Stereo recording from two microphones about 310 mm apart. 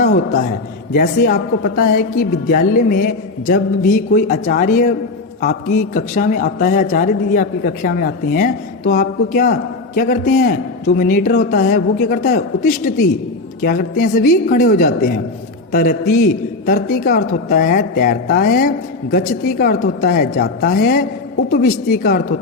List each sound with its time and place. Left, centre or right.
0.0 s a man's voice: left